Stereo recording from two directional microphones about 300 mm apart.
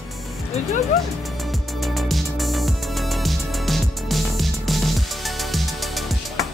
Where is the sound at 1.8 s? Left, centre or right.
Centre.